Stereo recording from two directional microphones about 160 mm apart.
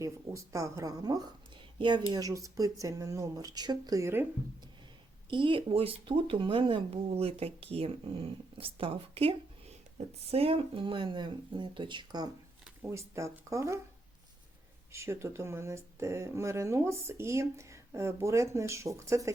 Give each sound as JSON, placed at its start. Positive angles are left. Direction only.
{"t": 0.0, "sound": "a woman's voice", "side_deg": -20}
{"t": 5.3, "sound": "speech", "side_deg": -30}
{"t": 12.6, "sound": "speech", "side_deg": -15}
{"t": 14.9, "sound": "speech", "side_deg": -15}